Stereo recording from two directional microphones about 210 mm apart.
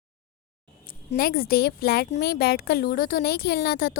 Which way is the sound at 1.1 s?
45° left (ahead or behind).